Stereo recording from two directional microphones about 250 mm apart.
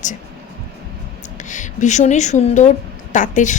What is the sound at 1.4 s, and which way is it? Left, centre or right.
A woman's voice, left.